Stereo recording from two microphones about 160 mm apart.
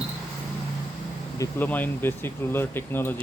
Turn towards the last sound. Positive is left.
turn(degrees=15)  # may be behind; listen again after turning